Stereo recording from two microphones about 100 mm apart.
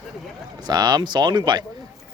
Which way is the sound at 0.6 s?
40° right (ahead or behind).